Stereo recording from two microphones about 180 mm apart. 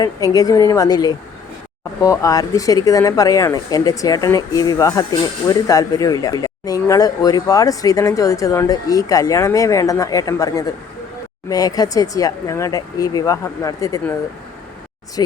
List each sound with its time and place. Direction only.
0.3 s speech: 20° left (ahead or behind)